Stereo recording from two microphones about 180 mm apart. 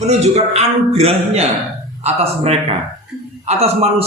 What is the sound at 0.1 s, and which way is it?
A man's voice, 35° right (ahead or behind).